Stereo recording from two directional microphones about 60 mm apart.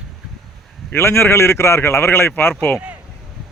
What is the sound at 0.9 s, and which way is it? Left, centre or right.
A man's voice, left.